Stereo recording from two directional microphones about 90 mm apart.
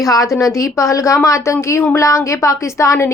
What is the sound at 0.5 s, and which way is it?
A woman's voice, 35° left (ahead or behind).